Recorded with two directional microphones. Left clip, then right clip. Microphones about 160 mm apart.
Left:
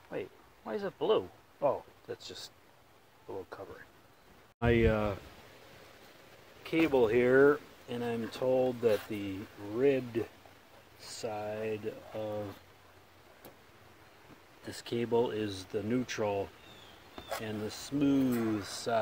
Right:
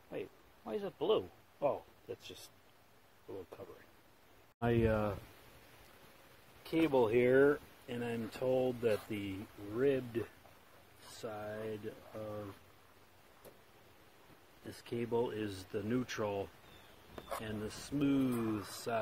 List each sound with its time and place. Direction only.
0.1 s a sound: 10° right (ahead or behind)
4.6 s speech: 10° right (ahead or behind)
6.6 s speech: 15° right (ahead or behind)
11.1 s speech: 5° right (ahead or behind)
14.7 s speech: 5° left (ahead or behind); by 18.9 s 10° right (ahead or behind)